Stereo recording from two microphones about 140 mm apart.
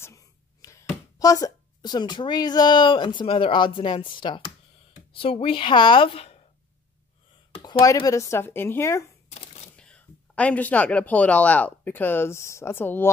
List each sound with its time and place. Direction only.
0.0 s a woman's voice: 20° left (ahead or behind); by 6.4 s 45° left (ahead or behind)
7.6 s speech: 30° left (ahead or behind)
9.4 s a sound: 45° left (ahead or behind)
9.8 s speech: 10° left (ahead or behind)